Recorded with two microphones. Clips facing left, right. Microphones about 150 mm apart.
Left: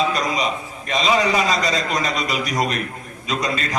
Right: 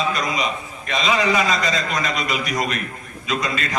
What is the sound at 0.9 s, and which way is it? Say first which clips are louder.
A man's voice: left 1 dB; 35° left (ahead or behind).